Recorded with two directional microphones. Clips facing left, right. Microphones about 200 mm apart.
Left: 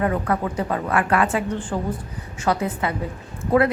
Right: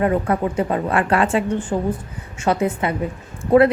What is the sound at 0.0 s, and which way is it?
A woman's voice, 25° right (ahead or behind).